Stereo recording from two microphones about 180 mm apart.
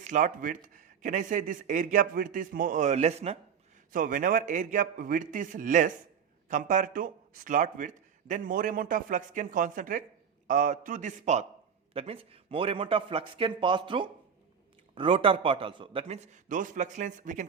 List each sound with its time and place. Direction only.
0.0 s speech: 45° right (ahead or behind)
3.9 s a man's voice: 50° right (ahead or behind)